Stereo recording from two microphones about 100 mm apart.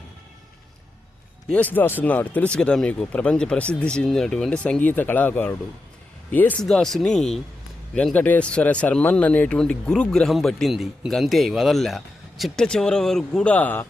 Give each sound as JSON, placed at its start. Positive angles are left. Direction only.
{"t": 1.5, "sound": "speech", "side_deg": 15}
{"t": 6.6, "sound": "speech", "side_deg": 5}